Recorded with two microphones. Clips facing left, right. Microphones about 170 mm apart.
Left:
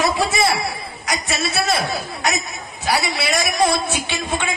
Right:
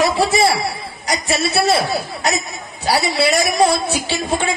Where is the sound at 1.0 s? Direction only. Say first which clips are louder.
Right 4 dB; 35° right (ahead or behind).